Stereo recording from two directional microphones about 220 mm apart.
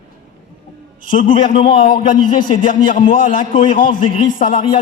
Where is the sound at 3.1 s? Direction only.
40° left (ahead or behind).